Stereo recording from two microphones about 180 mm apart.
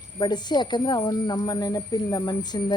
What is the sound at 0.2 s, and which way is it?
Speech, 25° left (ahead or behind).